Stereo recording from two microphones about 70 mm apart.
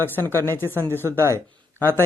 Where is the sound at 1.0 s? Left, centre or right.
Right.